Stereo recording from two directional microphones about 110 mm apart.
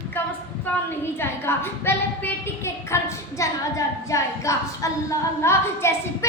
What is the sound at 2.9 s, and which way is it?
A woman's voice, 30° left (ahead or behind).